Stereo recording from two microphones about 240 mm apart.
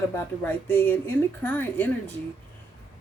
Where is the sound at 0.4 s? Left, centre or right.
Centre.